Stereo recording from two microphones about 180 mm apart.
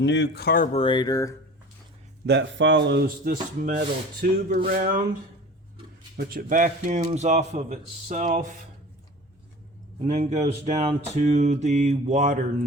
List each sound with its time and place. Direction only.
0.0 s speech: 75° left (ahead or behind); by 0.7 s 55° left (ahead or behind)
0.7 s speech: 30° left (ahead or behind)
2.2 s speech: 80° right; by 3.3 s 65° right (ahead or behind)
3.6 s speech: 50° right (ahead or behind)
6.1 s speech: 60° right (ahead or behind); by 8.4 s 45° right (ahead or behind)
10.0 s speech: 35° right (ahead or behind)